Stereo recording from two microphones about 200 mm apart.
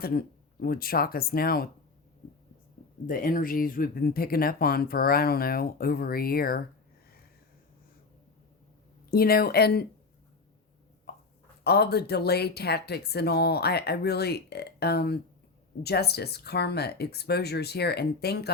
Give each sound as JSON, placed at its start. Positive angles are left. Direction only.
{"t": 0.0, "sound": "speech", "side_deg": 50}
{"t": 3.1, "sound": "speech", "side_deg": 45}
{"t": 9.0, "sound": "speech", "side_deg": 50}
{"t": 11.6, "sound": "speech", "side_deg": 55}